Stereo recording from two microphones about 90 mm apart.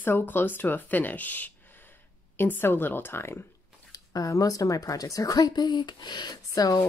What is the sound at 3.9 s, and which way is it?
Speech, 40° left (ahead or behind).